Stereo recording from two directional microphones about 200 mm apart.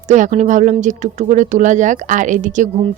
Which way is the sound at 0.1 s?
35° right (ahead or behind).